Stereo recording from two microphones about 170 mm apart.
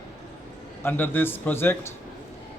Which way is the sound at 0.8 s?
10° left (ahead or behind).